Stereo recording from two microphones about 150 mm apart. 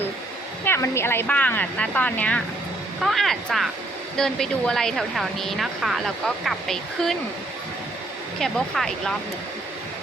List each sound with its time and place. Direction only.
0.6 s speech: 15° left (ahead or behind)
8.4 s speech: 5° left (ahead or behind)